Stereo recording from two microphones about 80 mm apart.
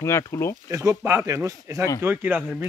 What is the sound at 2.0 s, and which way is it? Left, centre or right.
Speech, right.